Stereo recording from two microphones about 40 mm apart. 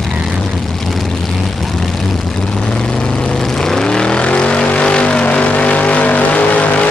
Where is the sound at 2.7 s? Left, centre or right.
Left.